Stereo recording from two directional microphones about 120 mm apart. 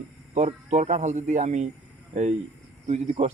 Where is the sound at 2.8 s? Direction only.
60° right (ahead or behind).